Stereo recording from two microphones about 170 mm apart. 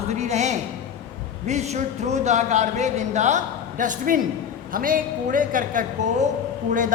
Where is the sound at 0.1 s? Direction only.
40° right (ahead or behind).